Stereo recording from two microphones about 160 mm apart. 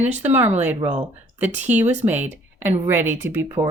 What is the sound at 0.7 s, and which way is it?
Speech, 30° right (ahead or behind).